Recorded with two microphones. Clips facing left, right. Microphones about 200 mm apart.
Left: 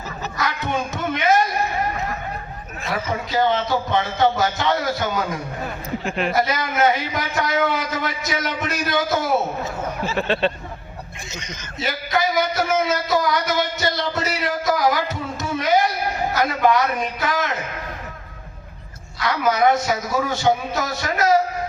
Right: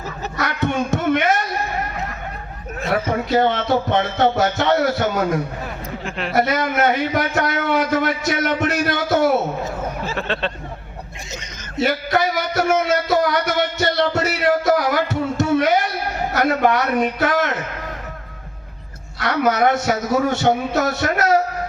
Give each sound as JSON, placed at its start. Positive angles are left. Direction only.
{"t": 0.3, "sound": "a sound", "side_deg": -65}
{"t": 2.8, "sound": "a man's voice", "side_deg": -60}
{"t": 10.2, "sound": "speech", "side_deg": 5}
{"t": 11.8, "sound": "a man's voice", "side_deg": -60}
{"t": 19.2, "sound": "a man's voice", "side_deg": -65}